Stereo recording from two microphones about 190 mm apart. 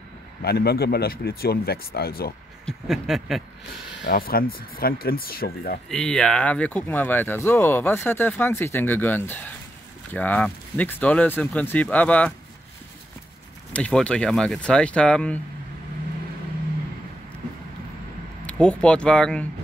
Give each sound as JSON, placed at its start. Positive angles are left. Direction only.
{"t": 0.4, "sound": "speech", "side_deg": 55}
{"t": 2.6, "sound": "speech", "side_deg": 0}
{"t": 4.0, "sound": "speech", "side_deg": 50}
{"t": 5.9, "sound": "speech", "side_deg": 5}
{"t": 13.7, "sound": "speech", "side_deg": 5}
{"t": 18.4, "sound": "speech", "side_deg": 5}